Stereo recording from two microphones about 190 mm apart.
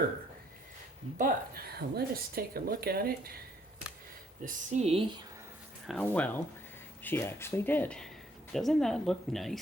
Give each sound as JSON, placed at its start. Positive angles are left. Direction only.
{"t": 1.2, "sound": "speech", "side_deg": -50}
{"t": 4.4, "sound": "speech", "side_deg": -40}
{"t": 5.9, "sound": "speech", "side_deg": 5}